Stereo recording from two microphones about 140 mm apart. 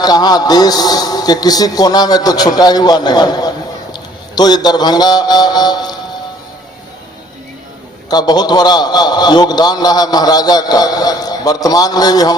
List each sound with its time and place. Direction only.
0.0 s a man's voice: 30° left (ahead or behind)
8.1 s a man's voice: 30° left (ahead or behind)